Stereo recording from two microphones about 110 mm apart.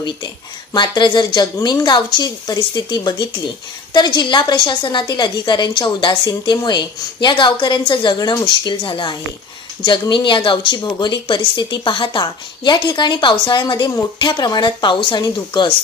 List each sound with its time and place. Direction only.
0.7 s a woman's voice: 45° left (ahead or behind)